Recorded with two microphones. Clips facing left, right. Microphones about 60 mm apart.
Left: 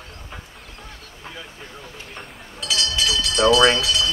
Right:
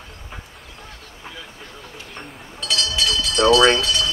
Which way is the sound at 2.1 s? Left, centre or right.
Centre.